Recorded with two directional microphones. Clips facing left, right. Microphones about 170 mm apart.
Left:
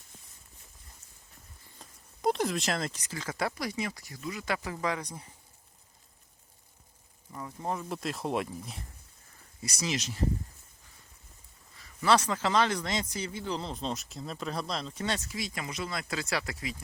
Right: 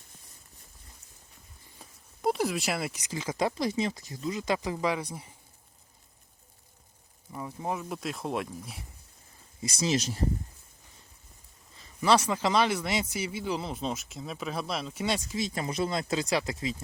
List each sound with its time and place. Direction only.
1.8 s a man's voice: 5° right (ahead or behind)
7.3 s speech: 10° right (ahead or behind)
9.6 s speech: 25° right (ahead or behind)
11.8 s a man's voice: 15° right (ahead or behind)
15.4 s speech: 30° right (ahead or behind)